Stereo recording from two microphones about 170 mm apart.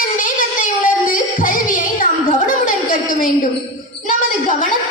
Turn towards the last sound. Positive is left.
turn(degrees=50)  # may be behind; listen again after turning